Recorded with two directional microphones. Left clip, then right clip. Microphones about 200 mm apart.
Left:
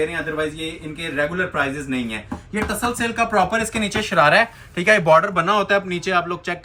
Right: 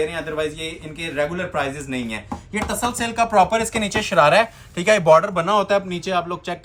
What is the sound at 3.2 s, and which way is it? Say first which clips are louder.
Speech: right 3 dB; 35° right (ahead or behind).